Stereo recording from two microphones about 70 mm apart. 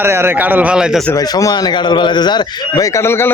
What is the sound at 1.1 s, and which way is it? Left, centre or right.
A man's voice, left.